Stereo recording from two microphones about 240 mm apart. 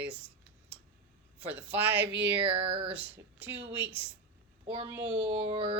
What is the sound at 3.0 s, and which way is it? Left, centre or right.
Speech, centre.